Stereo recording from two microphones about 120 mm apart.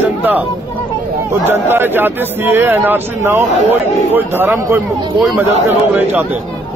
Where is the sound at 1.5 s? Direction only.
20° right (ahead or behind).